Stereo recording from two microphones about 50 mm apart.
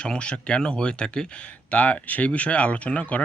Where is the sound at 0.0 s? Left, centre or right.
Centre.